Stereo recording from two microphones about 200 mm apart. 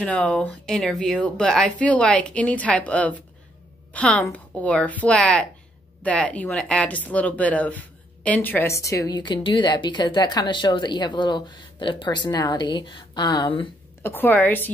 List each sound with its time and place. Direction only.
0.0 s a woman's voice: 5° left (ahead or behind); by 13.7 s 25° left (ahead or behind)
14.0 s a woman's voice: 10° left (ahead or behind)